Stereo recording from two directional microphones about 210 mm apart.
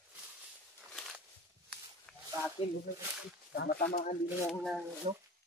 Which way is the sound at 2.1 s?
5° left (ahead or behind).